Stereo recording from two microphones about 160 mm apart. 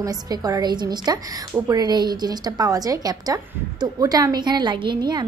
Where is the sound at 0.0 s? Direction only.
25° right (ahead or behind).